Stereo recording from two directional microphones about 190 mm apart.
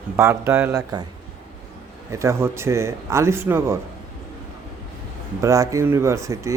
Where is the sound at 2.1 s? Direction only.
15° right (ahead or behind).